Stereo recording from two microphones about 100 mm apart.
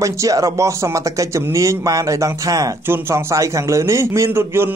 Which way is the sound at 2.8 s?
25° right (ahead or behind).